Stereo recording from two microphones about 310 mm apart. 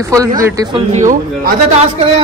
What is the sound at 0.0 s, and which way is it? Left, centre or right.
Speech, centre.